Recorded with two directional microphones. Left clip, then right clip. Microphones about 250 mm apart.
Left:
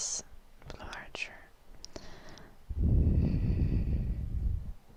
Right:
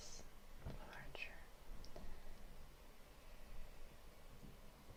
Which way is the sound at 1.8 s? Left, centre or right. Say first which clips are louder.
Left 14 dB; left.